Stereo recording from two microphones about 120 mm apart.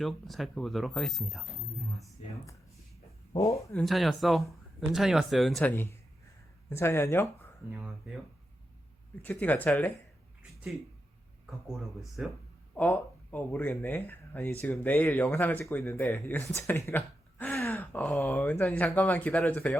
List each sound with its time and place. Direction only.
0.0 s speech: centre (ahead or behind)
3.3 s speech: 25° left (ahead or behind)
3.8 s speech: centre (ahead or behind)
5.6 s speech: 15° left (ahead or behind)
7.7 s speech: 10° right (ahead or behind)
9.2 s speech: 15° left (ahead or behind)
12.7 s speech: 15° left (ahead or behind)
17.6 s a sound: 15° left (ahead or behind)
18.3 s speech: 15° left (ahead or behind)